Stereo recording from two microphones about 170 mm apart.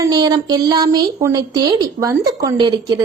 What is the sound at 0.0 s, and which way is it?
Speech, 25° right (ahead or behind).